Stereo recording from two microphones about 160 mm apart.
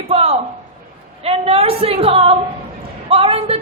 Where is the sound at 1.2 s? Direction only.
40° right (ahead or behind).